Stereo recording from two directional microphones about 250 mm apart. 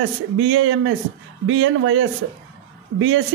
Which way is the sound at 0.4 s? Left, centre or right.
Right.